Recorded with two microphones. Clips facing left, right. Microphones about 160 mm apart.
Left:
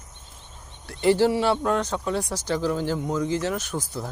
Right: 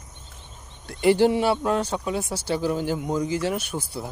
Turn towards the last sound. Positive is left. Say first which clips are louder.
# even
turn(degrees=-10)  # may be behind; listen again after turning